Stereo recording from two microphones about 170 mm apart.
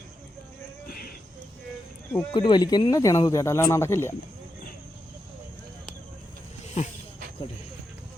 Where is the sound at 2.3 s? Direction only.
25° left (ahead or behind).